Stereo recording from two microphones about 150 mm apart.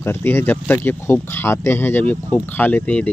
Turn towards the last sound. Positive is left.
turn(degrees=10)  # may be behind; listen again after turning